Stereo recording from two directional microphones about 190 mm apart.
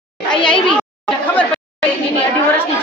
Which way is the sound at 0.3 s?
5° left (ahead or behind).